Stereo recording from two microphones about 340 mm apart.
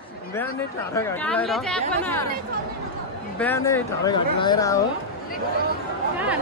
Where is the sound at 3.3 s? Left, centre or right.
Centre.